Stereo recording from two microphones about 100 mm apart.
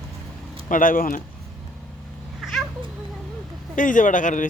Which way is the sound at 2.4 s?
Centre (ahead or behind).